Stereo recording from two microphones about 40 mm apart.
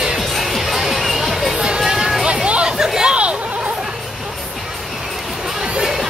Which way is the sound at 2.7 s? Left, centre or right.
Centre.